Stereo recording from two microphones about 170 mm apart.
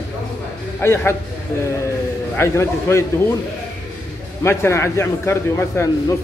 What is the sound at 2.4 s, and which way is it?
Speech, 15° left (ahead or behind).